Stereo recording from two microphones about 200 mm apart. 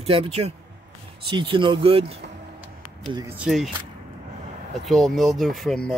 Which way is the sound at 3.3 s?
Centre (ahead or behind).